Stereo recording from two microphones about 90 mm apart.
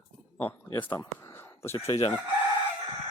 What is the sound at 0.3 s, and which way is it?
Speech, 20° left (ahead or behind).